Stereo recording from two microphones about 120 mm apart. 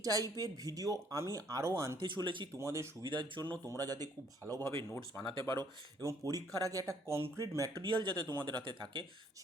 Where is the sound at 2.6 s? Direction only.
25° right (ahead or behind).